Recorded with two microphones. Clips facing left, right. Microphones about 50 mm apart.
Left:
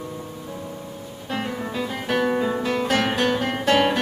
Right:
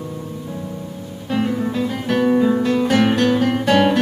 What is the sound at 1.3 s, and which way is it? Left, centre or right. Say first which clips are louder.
Guitar: right 7 dB; centre.